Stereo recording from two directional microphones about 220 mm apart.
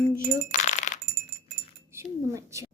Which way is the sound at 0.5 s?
35° left (ahead or behind).